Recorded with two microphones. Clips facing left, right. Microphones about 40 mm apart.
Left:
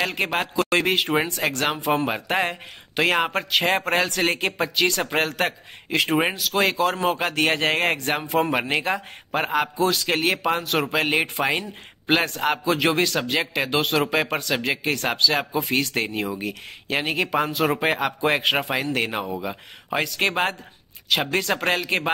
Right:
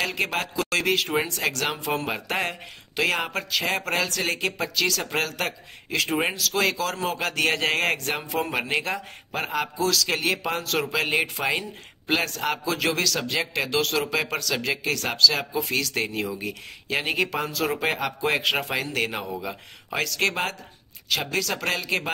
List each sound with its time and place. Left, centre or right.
0.0 s a man's voice: centre; by 6.0 s left
6.0 s a man's voice: centre
16.1 s speech: centre
17.4 s a man's voice: left